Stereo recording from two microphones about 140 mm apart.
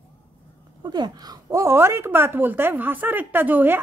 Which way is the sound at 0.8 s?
30° right (ahead or behind).